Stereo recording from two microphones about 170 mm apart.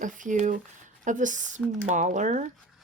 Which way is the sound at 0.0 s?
50° right (ahead or behind).